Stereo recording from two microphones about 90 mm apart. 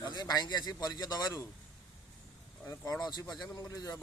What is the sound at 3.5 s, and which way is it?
Speech, 40° left (ahead or behind).